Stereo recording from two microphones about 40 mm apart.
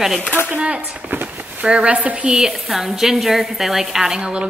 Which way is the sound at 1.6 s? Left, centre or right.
Right.